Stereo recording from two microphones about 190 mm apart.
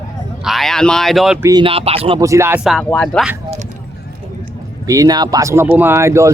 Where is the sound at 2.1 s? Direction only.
15° right (ahead or behind).